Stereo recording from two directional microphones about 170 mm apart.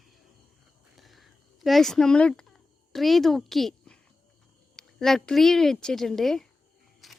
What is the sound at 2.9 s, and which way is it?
Speech, centre (ahead or behind).